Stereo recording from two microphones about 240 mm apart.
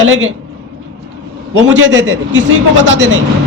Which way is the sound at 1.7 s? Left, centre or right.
Right.